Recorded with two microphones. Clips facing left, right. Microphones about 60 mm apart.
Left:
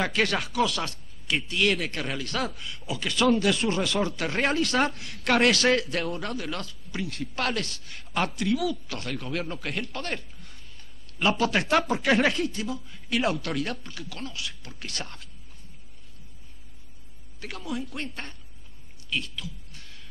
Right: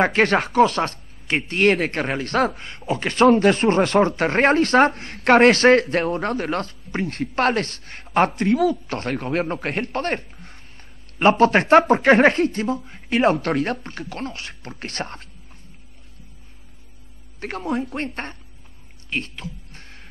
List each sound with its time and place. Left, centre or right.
0.0 s speech: right
17.4 s speech: right
19.0 s a sound: right